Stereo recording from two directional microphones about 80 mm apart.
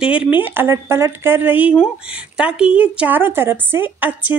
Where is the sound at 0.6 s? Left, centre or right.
Right.